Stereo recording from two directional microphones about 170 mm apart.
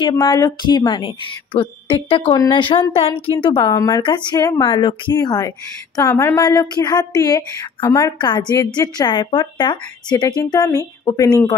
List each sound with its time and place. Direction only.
0.2 s a woman's voice: 25° left (ahead or behind)